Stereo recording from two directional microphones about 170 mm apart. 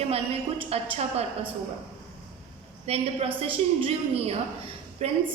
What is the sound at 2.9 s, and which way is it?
A woman's voice, 35° right (ahead or behind).